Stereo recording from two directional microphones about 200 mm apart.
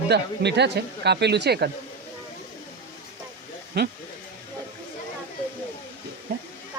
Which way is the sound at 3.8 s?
55° right (ahead or behind).